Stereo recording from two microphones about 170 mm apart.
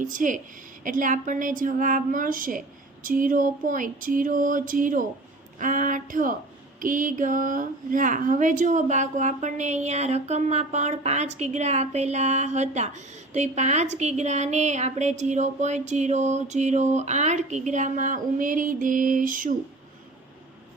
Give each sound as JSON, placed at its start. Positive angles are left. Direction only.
{"t": 0.0, "sound": "speech", "side_deg": -50}